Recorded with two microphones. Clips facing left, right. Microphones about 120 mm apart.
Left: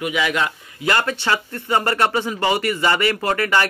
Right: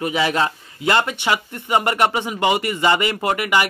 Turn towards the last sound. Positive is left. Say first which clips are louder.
# even
turn(degrees=-15)  # may be behind; listen again after turning